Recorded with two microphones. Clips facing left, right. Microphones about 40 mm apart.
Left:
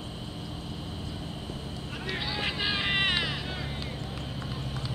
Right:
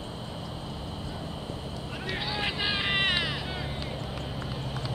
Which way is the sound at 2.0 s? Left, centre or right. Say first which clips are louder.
Right 1 dB; centre.